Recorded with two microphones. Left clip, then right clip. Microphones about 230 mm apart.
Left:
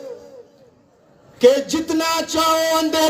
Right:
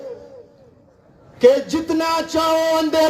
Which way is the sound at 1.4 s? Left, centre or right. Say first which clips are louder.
Even; left.